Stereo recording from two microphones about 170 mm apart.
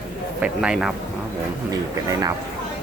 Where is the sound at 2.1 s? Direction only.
20° right (ahead or behind).